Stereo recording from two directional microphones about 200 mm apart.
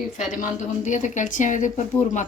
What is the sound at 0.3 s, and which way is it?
A woman's voice, 40° left (ahead or behind).